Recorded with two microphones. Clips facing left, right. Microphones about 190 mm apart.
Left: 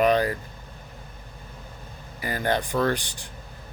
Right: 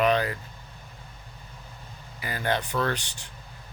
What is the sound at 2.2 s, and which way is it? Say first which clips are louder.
Speech: left 4 dB; 40° left (ahead or behind).